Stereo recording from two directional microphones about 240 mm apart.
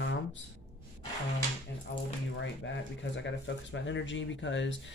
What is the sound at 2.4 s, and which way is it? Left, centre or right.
Speech, left.